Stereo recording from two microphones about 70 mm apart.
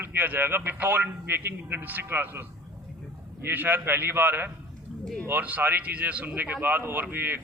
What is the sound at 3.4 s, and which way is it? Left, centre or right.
A man's voice, right.